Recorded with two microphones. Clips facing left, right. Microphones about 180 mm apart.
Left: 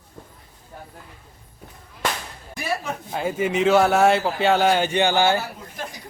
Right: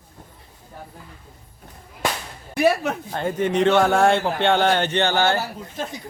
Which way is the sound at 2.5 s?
65° right (ahead or behind).